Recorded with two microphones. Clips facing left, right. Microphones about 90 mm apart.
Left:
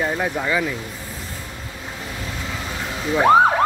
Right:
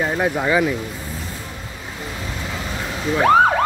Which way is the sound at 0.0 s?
15° right (ahead or behind).